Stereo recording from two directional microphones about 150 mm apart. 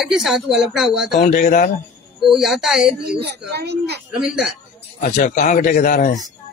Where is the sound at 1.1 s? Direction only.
75° left (ahead or behind).